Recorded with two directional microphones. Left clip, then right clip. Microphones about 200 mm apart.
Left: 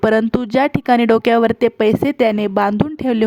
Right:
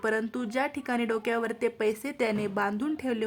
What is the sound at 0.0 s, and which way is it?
Speech, 40° left (ahead or behind).